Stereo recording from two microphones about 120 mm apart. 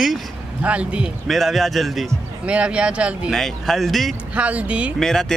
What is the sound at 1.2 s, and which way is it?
Speech, centre (ahead or behind).